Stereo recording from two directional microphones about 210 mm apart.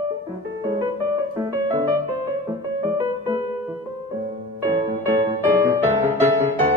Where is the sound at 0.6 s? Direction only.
20° right (ahead or behind).